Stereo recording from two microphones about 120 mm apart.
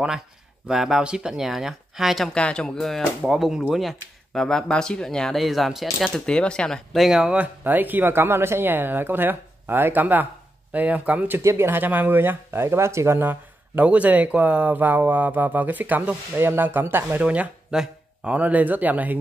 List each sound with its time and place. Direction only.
0.7 s speech: 5° right (ahead or behind)